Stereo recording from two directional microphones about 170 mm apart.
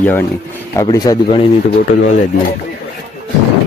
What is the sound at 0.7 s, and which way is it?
Speech, 20° left (ahead or behind).